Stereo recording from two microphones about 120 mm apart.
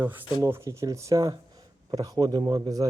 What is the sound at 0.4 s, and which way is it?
A man's voice, 25° right (ahead or behind).